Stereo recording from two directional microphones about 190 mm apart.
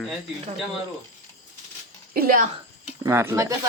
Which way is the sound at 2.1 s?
50° right (ahead or behind).